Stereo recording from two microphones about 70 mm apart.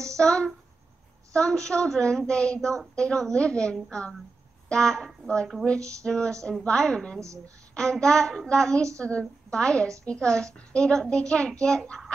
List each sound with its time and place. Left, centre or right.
0.2 s a sound: centre
1.3 s a woman's voice: centre
5.8 s a woman's voice: right
6.0 s a woman's voice: centre
7.2 s a woman's voice: right
7.7 s a woman's voice: centre